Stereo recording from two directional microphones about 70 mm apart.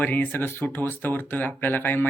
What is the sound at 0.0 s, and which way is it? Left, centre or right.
Speech, left.